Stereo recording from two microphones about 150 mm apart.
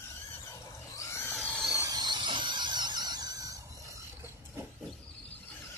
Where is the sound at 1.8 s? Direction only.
25° right (ahead or behind).